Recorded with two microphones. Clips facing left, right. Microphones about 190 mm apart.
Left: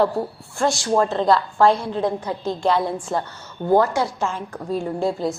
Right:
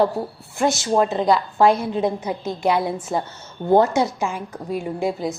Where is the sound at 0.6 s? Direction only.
20° right (ahead or behind).